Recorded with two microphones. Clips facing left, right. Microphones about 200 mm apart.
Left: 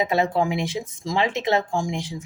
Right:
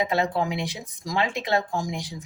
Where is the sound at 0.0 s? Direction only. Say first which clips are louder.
Left 3 dB; 25° left (ahead or behind).